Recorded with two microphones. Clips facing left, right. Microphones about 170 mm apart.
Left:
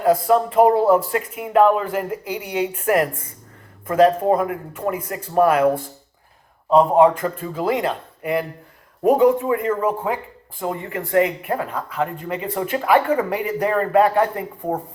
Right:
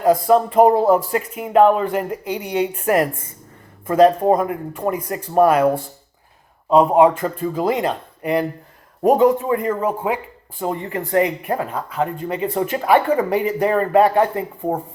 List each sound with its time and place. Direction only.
0.3 s speech: 30° right (ahead or behind)
6.7 s speech: 15° right (ahead or behind)
7.2 s speech: 30° right (ahead or behind)